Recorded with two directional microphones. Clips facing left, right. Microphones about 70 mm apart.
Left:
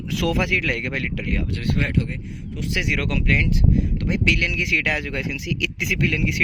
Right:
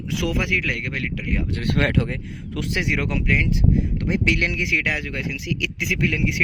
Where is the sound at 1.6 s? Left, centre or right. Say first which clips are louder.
Right 5 dB; right.